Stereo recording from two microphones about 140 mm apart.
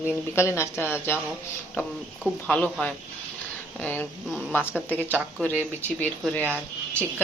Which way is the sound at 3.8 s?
10° left (ahead or behind).